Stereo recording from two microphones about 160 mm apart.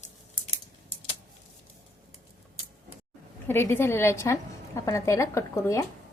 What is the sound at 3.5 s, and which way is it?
A woman's voice, 15° left (ahead or behind).